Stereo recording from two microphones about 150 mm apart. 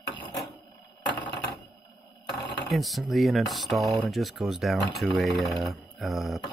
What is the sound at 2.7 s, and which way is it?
Speech, centre (ahead or behind).